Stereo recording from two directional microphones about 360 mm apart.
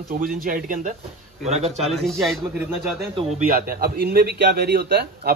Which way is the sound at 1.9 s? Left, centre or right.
Centre.